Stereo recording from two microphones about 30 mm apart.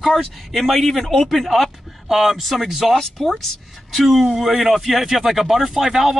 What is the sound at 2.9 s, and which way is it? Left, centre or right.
Speech, centre.